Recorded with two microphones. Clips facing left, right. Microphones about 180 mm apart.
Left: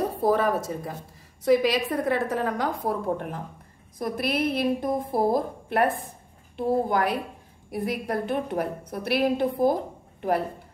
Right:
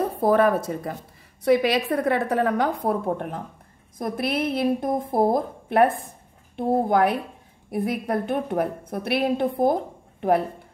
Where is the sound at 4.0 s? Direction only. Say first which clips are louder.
Right 1 dB; 50° right (ahead or behind).